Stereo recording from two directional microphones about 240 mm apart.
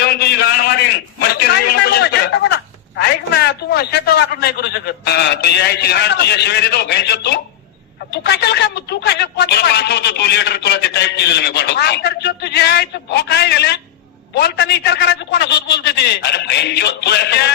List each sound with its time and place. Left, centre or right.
0.0 s a sound: left
1.5 s telephone: left
2.9 s a man's voice: left